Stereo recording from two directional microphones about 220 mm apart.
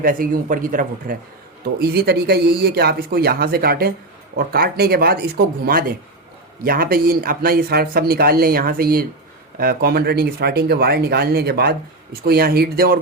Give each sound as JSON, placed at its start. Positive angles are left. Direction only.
{"t": 0.0, "sound": "speech", "side_deg": -40}
{"t": 6.6, "sound": "speech", "side_deg": -40}